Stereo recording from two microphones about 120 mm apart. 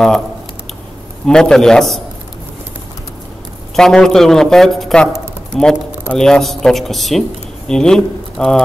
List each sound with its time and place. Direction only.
1.2 s speech: 5° left (ahead or behind)
3.7 s speech: 5° left (ahead or behind)